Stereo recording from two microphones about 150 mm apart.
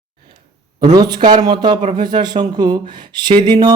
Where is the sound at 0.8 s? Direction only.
30° right (ahead or behind).